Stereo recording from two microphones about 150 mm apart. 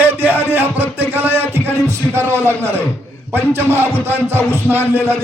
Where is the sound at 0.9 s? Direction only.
15° right (ahead or behind).